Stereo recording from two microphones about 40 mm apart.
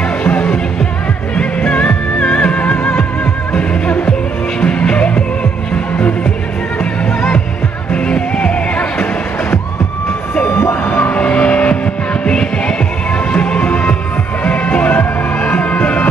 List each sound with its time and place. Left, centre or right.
0.2 s music: left
1.6 s music: left
2.6 s music: left
4.6 s music: left
8.1 s music: left
10.3 s vehicle: left
10.9 s a sound: left
11.1 s vehicle: left
11.8 s music: left